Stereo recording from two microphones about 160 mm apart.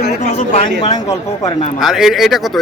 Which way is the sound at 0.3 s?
45° left (ahead or behind).